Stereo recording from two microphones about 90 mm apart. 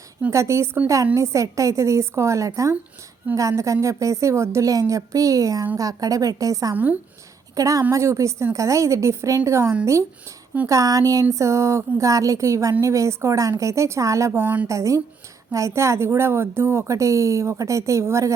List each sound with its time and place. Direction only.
0.3 s a woman's voice: 35° right (ahead or behind)
14.3 s speech: 20° right (ahead or behind)
14.7 s a woman's voice: 35° right (ahead or behind)